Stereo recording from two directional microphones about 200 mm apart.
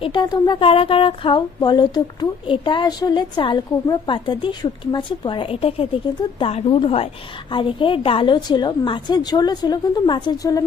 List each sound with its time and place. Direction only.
0.0 s speech: 25° left (ahead or behind)